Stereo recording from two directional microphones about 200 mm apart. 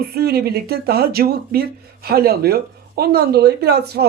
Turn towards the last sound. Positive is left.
turn(degrees=-55)  # may be behind; listen again after turning